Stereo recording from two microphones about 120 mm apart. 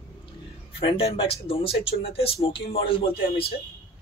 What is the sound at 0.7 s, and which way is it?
Speech, 50° left (ahead or behind).